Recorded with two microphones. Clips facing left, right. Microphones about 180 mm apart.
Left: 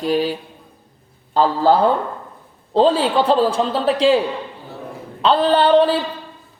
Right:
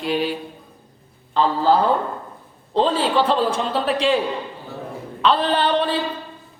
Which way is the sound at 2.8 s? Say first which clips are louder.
Left 3 dB; 35° left (ahead or behind).